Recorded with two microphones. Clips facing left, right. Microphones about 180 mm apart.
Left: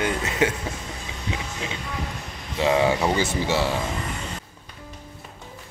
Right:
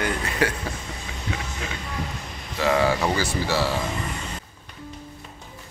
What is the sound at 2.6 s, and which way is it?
Speech, 25° left (ahead or behind).